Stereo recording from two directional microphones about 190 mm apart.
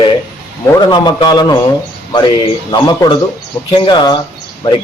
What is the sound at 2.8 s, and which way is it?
Speech, 25° left (ahead or behind).